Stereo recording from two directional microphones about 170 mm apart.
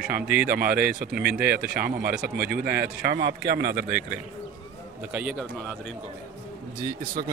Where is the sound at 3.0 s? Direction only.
80° right.